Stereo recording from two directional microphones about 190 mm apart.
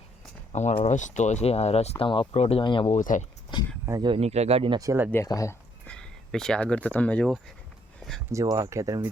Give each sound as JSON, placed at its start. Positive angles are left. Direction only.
{"t": 0.5, "sound": "speech", "side_deg": 35}
{"t": 2.9, "sound": "speech", "side_deg": 40}
{"t": 3.8, "sound": "speech", "side_deg": -20}
{"t": 4.8, "sound": "speech", "side_deg": -15}
{"t": 5.1, "sound": "speech", "side_deg": 15}
{"t": 5.9, "sound": "speech", "side_deg": 5}
{"t": 7.9, "sound": "a sound", "side_deg": 0}
{"t": 8.3, "sound": "speech", "side_deg": -20}